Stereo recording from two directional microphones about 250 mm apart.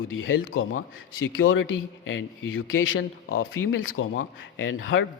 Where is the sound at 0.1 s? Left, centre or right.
Left.